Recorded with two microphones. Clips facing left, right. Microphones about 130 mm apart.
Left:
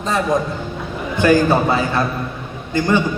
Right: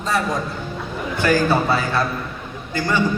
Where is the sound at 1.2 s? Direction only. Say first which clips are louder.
Left 4 dB; 20° left (ahead or behind).